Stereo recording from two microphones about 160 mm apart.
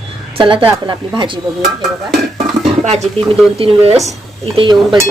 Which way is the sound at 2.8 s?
45° right (ahead or behind).